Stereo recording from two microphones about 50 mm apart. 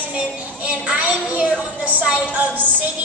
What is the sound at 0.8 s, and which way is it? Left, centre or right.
Speech, right.